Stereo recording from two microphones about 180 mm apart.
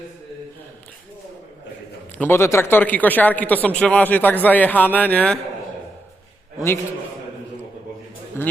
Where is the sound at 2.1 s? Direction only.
10° left (ahead or behind).